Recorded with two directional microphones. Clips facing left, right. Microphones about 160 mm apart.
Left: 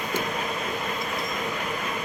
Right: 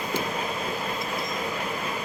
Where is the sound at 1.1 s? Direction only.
30° right (ahead or behind).